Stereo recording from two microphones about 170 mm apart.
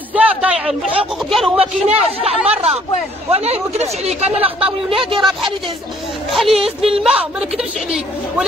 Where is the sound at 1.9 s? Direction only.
35° right (ahead or behind).